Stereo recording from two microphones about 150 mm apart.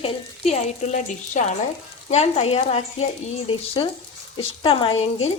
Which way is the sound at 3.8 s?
30° left (ahead or behind).